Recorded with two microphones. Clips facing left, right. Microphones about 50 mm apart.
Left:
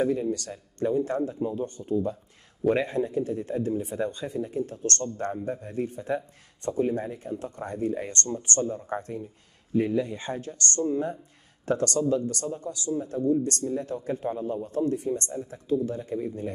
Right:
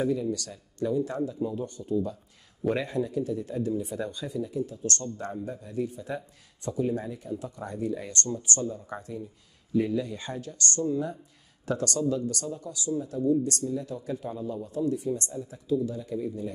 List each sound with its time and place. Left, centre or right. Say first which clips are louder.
0.0 s speech: left 2 dB; left